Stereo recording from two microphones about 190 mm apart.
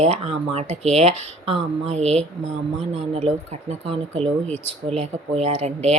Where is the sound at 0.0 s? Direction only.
35° right (ahead or behind).